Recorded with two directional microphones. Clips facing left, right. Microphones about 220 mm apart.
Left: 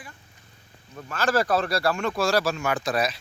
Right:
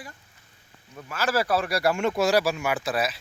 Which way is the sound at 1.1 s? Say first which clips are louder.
Left 2 dB; 10° right (ahead or behind).